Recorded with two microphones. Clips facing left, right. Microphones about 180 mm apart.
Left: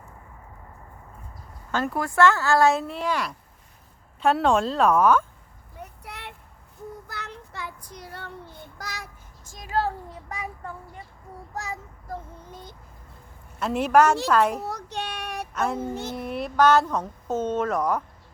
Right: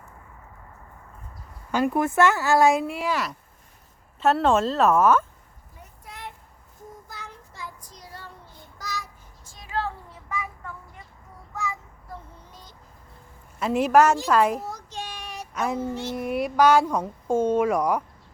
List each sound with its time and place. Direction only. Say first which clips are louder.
1.7 s speech: right 3 dB; 15° right (ahead or behind)
5.8 s a sound: left 1 dB; 70° left (ahead or behind)
7.1 s child singing: left 4 dB; 70° left (ahead or behind); by 10.5 s 35° left (ahead or behind)
11.5 s child singing: right 2 dB; 40° left (ahead or behind)
12.5 s vehicle: left 6 dB; 55° left (ahead or behind)
13.6 s speech: right 1 dB; 5° right (ahead or behind)
14.6 s child singing: left 3 dB; 65° left (ahead or behind)
15.5 s a sound: even; 5° right (ahead or behind)
16.1 s speech: right 2 dB; 10° right (ahead or behind)